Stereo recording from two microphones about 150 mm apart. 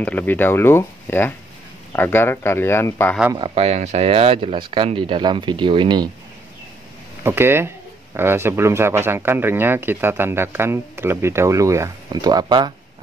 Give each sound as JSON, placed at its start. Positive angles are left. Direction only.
{"t": 0.0, "sound": "speech", "side_deg": 10}
{"t": 3.3, "sound": "speech", "side_deg": -40}
{"t": 7.2, "sound": "speech", "side_deg": -15}